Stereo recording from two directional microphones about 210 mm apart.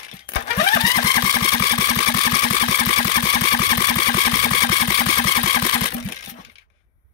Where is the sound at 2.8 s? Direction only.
50° left (ahead or behind).